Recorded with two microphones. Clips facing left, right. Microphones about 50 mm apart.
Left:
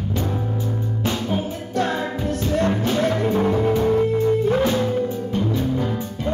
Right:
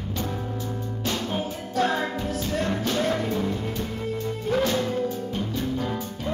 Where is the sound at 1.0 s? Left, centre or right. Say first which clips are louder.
Left 4 dB; left.